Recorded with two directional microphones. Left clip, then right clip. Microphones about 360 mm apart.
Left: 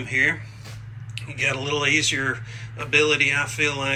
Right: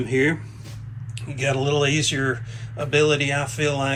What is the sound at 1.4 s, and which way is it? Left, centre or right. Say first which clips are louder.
A man's voice: right 2 dB; centre.